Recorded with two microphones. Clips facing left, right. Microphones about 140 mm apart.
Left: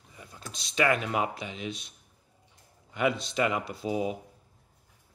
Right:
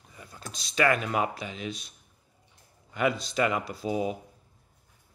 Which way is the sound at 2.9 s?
20° left (ahead or behind).